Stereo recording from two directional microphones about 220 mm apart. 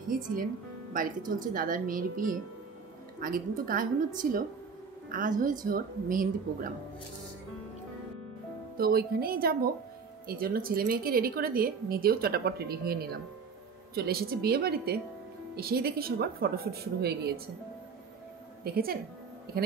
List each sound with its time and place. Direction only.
0.1 s a woman's voice: 40° right (ahead or behind)
8.7 s a woman's voice: 45° right (ahead or behind)
18.6 s a woman's voice: 45° right (ahead or behind)